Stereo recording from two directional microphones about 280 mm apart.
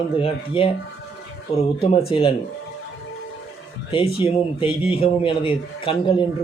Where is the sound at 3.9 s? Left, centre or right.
Centre.